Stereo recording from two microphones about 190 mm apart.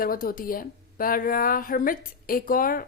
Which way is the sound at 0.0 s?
50° left (ahead or behind).